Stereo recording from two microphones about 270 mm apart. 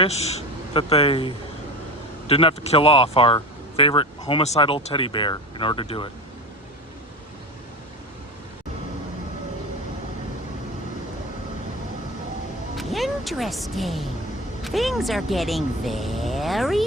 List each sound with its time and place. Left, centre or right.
0.0 s speech: left
12.7 s music: centre
14.6 s speech: centre